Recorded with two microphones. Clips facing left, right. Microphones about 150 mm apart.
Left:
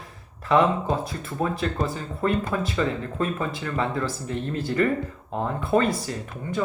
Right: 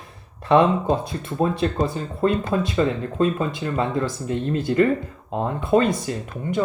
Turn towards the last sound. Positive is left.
turn(degrees=-20)  # may be behind; listen again after turning